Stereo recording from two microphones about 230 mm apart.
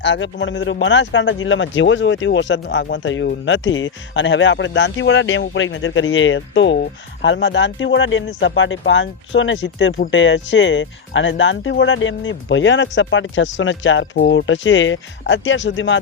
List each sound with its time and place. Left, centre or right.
0.0 s speech: left